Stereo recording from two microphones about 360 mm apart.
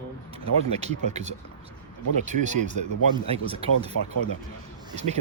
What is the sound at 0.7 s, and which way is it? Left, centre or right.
Speech, centre.